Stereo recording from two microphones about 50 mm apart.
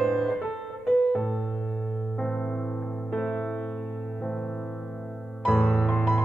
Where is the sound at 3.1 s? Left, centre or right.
Centre.